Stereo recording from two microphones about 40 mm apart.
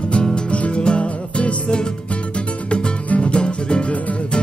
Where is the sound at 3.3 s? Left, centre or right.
Left.